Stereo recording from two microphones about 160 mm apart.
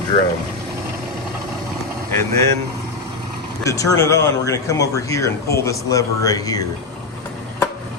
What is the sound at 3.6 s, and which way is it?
Speech, 20° left (ahead or behind).